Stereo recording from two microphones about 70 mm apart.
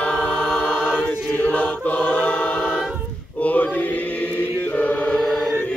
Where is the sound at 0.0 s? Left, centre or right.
Centre.